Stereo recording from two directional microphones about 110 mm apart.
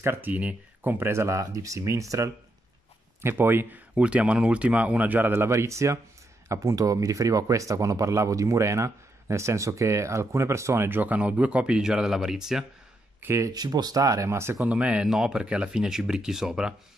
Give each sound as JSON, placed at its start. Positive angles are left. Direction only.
{"t": 0.0, "sound": "speech", "side_deg": -20}
{"t": 13.2, "sound": "speech", "side_deg": -25}
{"t": 13.5, "sound": "speech", "side_deg": -35}